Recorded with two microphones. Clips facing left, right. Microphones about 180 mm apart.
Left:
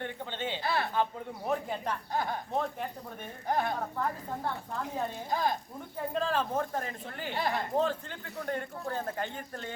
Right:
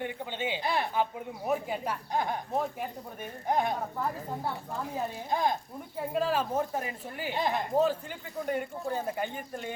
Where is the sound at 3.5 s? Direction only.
15° right (ahead or behind).